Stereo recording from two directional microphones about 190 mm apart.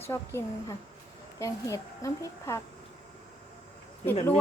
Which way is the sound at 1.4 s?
15° left (ahead or behind).